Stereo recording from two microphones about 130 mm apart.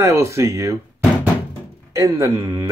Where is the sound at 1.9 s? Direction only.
25° right (ahead or behind).